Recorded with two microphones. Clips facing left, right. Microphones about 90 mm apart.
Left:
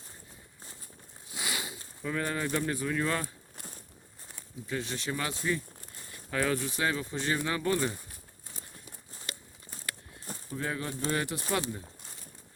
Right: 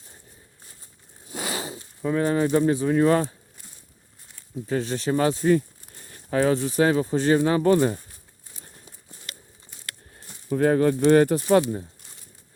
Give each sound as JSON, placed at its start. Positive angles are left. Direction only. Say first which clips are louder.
{"t": 1.3, "sound": "a sound", "louder": "right 7 dB", "side_deg": -45}
{"t": 2.0, "sound": "speech", "louder": "right 10 dB", "side_deg": -30}
{"t": 4.6, "sound": "speech", "louder": "right 9 dB", "side_deg": -40}
{"t": 6.3, "sound": "speech", "louder": "right 9 dB", "side_deg": -30}
{"t": 10.3, "sound": "a sound", "louder": "left 9 dB", "side_deg": 40}
{"t": 10.7, "sound": "speech", "louder": "right 16 dB", "side_deg": -50}